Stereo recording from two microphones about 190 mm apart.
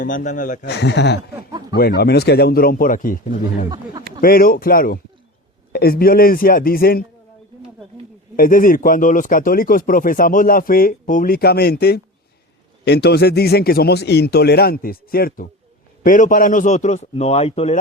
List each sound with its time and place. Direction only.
0.0 s speech: 45° left (ahead or behind)
0.6 s a man's voice: 65° left (ahead or behind)
8.4 s a man's voice: 45° left (ahead or behind)